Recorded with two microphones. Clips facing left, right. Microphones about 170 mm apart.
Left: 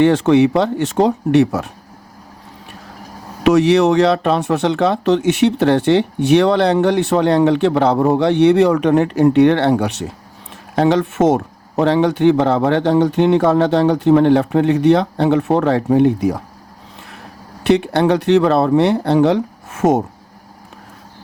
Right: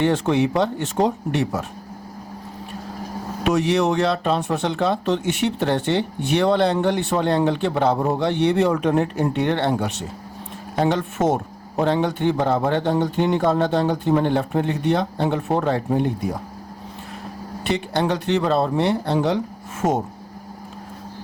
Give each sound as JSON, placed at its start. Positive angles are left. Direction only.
{"t": 0.0, "sound": "speech", "side_deg": 75}
{"t": 3.4, "sound": "speech", "side_deg": 80}
{"t": 10.8, "sound": "a man's voice", "side_deg": 90}
{"t": 17.6, "sound": "speech", "side_deg": 70}